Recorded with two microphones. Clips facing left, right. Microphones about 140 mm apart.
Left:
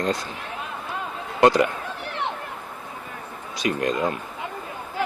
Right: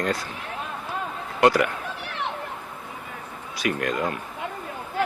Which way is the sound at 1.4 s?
25° left (ahead or behind).